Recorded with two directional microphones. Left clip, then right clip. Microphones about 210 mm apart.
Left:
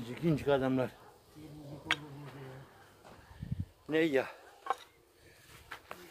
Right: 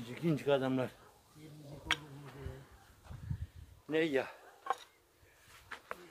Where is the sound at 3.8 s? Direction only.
30° left (ahead or behind).